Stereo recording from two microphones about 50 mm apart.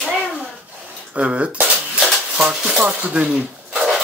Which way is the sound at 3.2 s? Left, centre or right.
Centre.